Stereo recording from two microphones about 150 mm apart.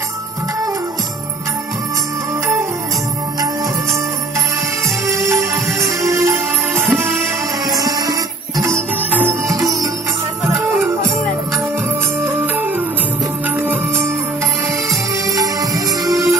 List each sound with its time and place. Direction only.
4.8 s music: 20° right (ahead or behind)
7.7 s music: 25° right (ahead or behind)
12.3 s music: 10° right (ahead or behind)
15.3 s music: 25° right (ahead or behind)